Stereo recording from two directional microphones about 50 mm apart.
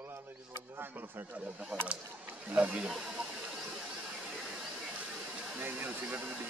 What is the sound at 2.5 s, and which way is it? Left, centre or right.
Speech, right.